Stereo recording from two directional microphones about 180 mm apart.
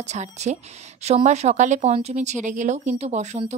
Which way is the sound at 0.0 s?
40° right (ahead or behind).